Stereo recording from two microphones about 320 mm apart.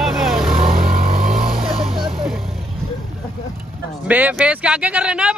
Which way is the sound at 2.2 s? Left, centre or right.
Centre.